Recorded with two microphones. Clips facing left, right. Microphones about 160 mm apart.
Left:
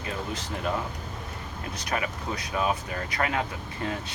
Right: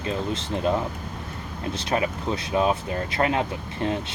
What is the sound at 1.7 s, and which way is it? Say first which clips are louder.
Speech: right 5 dB; 30° right (ahead or behind).